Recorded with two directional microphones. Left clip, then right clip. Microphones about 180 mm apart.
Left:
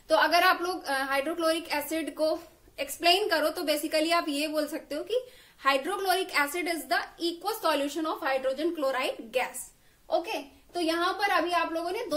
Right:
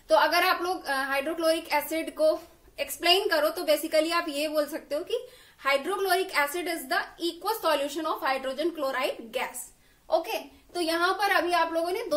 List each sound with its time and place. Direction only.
0.1 s a woman's voice: 25° left (ahead or behind)